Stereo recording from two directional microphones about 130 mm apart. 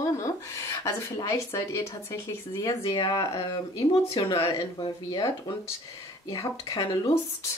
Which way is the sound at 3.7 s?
50° left (ahead or behind).